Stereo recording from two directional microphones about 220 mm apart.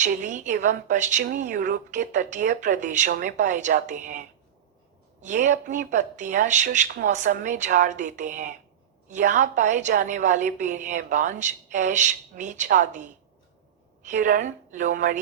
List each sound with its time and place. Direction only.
0.0 s speech: 35° right (ahead or behind)
5.2 s speech: 35° right (ahead or behind)